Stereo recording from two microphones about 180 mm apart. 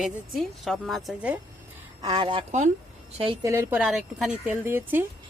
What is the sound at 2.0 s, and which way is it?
Speech, 25° right (ahead or behind).